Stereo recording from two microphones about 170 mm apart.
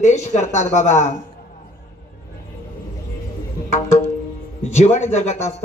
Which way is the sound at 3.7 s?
40° left (ahead or behind).